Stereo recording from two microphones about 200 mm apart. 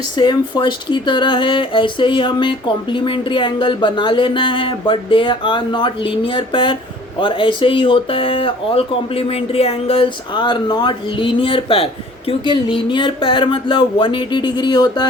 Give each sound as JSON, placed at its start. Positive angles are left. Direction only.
{"t": 0.2, "sound": "speech", "side_deg": 25}